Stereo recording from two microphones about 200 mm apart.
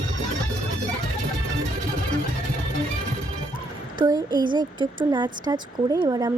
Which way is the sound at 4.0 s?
20° right (ahead or behind).